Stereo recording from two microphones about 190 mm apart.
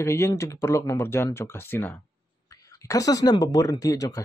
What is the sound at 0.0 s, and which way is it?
Speech, 15° left (ahead or behind).